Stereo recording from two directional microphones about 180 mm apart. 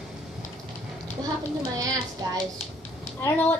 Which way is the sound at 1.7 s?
20° right (ahead or behind).